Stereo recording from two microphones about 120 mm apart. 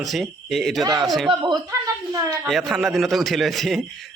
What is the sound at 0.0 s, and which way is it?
Speech, centre (ahead or behind).